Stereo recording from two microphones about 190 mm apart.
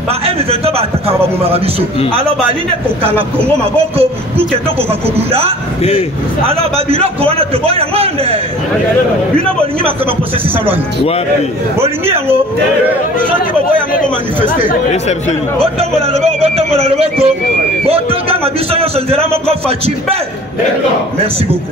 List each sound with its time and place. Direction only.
0.2 s a man's voice: 30° right (ahead or behind)
3.0 s a man's voice: 30° right (ahead or behind)
14.7 s speech: 35° left (ahead or behind)
15.6 s a man's voice: 30° right (ahead or behind)